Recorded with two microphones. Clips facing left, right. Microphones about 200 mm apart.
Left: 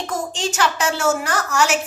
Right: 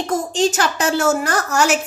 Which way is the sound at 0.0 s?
40° right (ahead or behind).